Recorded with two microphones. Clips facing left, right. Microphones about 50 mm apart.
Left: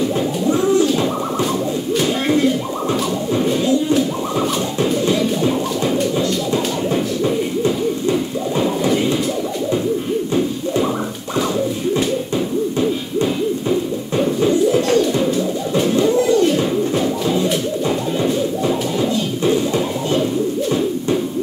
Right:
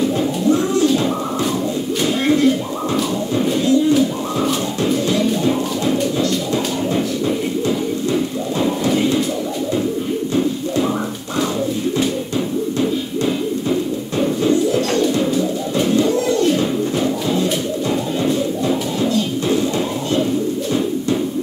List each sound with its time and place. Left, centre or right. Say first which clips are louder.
2.0 s a sound: right 1 dB; centre
2.9 s bird: even; centre
5.0 s music: even; centre
13.7 s music: left 1 dB; centre
14.5 s bird: left 2 dB; centre
16.0 s a sound: left 4 dB; centre
16.4 s bird: left 1 dB; centre
18.9 s music: even; centre